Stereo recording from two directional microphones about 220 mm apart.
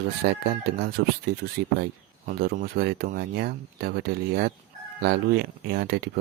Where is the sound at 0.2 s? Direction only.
50° right (ahead or behind).